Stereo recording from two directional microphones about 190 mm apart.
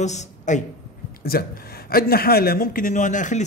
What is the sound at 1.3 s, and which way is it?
A man's voice, 55° left (ahead or behind).